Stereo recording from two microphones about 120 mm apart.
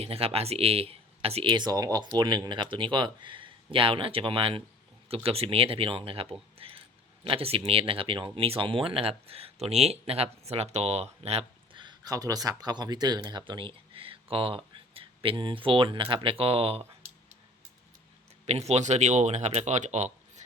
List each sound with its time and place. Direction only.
0.0 s speech: 55° right (ahead or behind)
1.5 s speech: 35° right (ahead or behind); by 11.8 s 60° right (ahead or behind)
11.8 s speech: 35° right (ahead or behind); by 16.8 s 55° right (ahead or behind)
18.4 s speech: 65° right (ahead or behind)